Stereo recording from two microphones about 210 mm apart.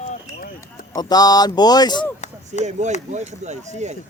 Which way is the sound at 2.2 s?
35° left (ahead or behind).